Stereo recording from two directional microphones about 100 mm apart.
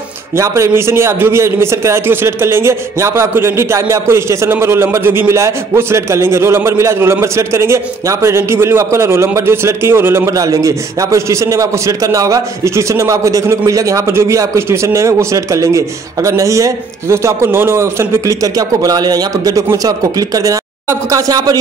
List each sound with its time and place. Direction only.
0.4 s a man's voice: 30° right (ahead or behind)